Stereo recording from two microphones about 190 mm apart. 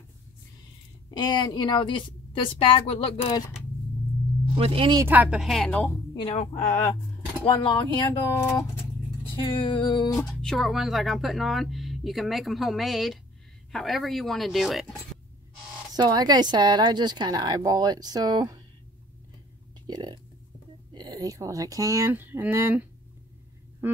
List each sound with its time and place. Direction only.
1.1 s a woman's voice: 20° left (ahead or behind)
4.6 s a woman's voice: 30° right (ahead or behind)
5.0 s speech: 10° right (ahead or behind)
6.3 s speech: 35° left (ahead or behind)
7.4 s a woman's voice: 25° left (ahead or behind)
10.4 s speech: centre (ahead or behind)
15.9 s a woman's voice: 20° right (ahead or behind)
19.9 s a woman's voice: 20° right (ahead or behind)
23.8 s quack: 10° right (ahead or behind)